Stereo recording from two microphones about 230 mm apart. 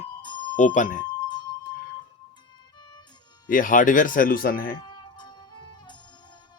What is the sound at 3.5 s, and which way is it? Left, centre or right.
Speech, left.